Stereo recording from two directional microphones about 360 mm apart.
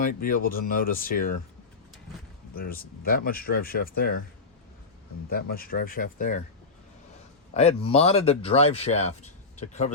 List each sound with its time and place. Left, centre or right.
0.0 s speech: left
2.6 s speech: left
5.3 s speech: left
7.5 s speech: centre